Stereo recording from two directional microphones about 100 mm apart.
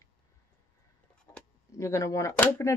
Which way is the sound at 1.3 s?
35° left (ahead or behind).